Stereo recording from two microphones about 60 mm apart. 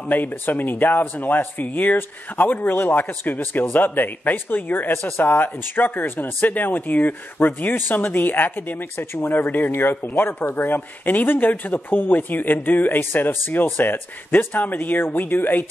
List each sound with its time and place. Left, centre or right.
0.1 s speech: left